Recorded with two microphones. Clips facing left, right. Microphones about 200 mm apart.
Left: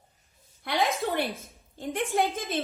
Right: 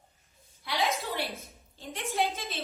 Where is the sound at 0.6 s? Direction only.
50° left (ahead or behind).